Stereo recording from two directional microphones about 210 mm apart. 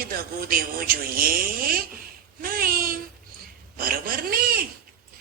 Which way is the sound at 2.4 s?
45° right (ahead or behind).